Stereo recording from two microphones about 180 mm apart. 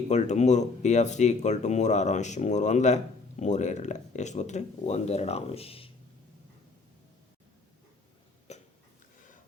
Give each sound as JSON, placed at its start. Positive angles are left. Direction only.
{"t": 0.1, "sound": "speech", "side_deg": 40}
{"t": 8.5, "sound": "cough", "side_deg": 40}